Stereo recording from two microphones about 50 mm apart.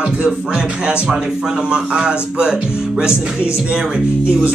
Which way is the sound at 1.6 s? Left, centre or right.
Centre.